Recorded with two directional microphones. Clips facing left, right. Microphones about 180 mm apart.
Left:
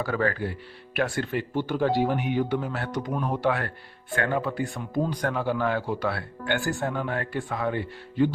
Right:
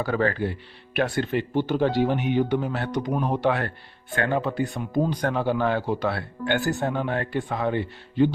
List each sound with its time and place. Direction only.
0.0 s speech: 25° right (ahead or behind)